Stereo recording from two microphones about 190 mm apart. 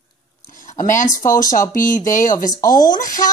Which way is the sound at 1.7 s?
45° left (ahead or behind).